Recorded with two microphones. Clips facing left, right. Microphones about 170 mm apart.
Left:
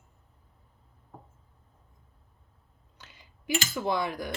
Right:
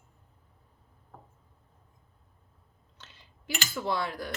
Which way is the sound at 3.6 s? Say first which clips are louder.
Even; 20° left (ahead or behind).